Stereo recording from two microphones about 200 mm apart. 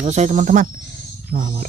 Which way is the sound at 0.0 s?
35° right (ahead or behind).